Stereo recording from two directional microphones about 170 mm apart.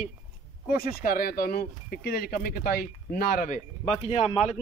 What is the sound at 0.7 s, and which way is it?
Speech, 60° left (ahead or behind).